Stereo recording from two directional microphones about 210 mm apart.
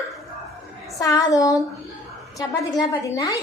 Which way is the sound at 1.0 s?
15° left (ahead or behind).